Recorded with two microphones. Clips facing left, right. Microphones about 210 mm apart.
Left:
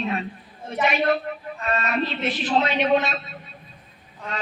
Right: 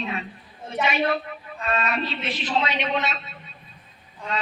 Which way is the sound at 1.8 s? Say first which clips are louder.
Left 3 dB; 50° left (ahead or behind).